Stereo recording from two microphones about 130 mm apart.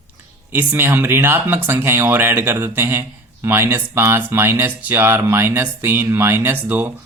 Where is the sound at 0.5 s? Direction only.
15° right (ahead or behind).